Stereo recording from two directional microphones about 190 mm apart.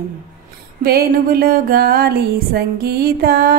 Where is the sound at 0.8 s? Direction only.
50° right (ahead or behind).